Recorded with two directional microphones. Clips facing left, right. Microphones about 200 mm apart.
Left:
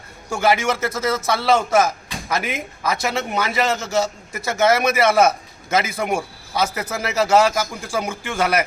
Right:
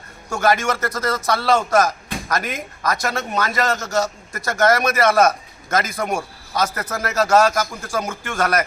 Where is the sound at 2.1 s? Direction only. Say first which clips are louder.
Right 4 dB; 55° right (ahead or behind).